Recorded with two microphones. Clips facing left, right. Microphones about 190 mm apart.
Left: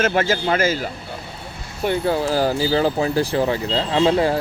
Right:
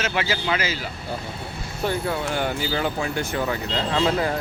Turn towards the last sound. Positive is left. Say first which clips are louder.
# left 5 dB
turn(degrees=30)  # may be behind; listen again after turning